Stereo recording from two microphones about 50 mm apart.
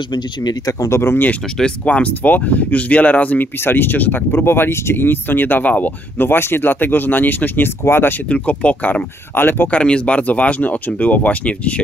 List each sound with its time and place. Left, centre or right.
0.8 s speech: left
1.6 s speech: left
3.5 s speech: left
8.3 s speech: left
9.3 s speech: left
9.7 s speech: left